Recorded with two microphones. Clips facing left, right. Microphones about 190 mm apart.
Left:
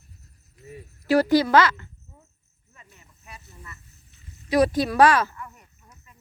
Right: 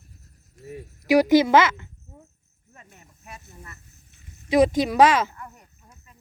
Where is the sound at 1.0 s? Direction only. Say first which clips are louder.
Right 2 dB; 15° right (ahead or behind).